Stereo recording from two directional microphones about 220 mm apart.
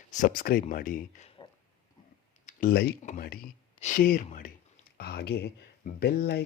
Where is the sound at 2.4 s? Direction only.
40° left (ahead or behind).